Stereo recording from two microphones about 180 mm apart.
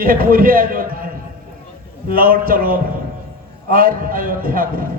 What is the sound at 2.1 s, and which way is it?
A man's voice, 55° right (ahead or behind).